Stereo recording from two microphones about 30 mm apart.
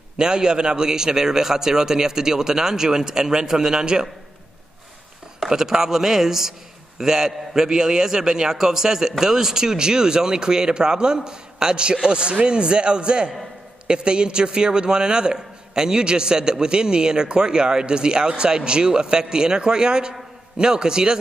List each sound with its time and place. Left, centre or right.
0.2 s a man's voice: right
5.5 s a man's voice: centre